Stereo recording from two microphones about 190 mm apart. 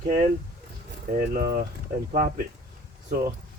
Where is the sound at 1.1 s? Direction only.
45° right (ahead or behind).